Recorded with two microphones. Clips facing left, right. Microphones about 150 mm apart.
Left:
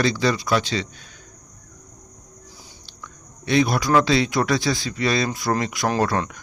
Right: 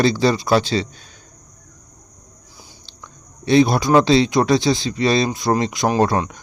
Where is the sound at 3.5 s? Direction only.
30° right (ahead or behind).